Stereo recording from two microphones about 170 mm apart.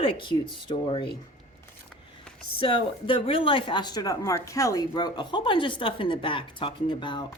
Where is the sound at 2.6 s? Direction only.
30° left (ahead or behind).